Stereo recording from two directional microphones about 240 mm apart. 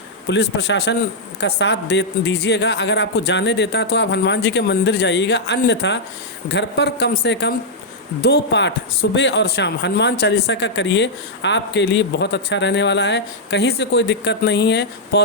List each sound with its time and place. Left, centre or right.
0.3 s speech: left